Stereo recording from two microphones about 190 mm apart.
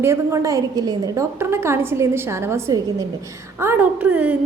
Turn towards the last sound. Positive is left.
turn(degrees=-5)  # may be behind; listen again after turning